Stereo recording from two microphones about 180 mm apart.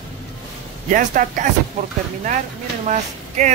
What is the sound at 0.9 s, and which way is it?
Speech, 45° right (ahead or behind).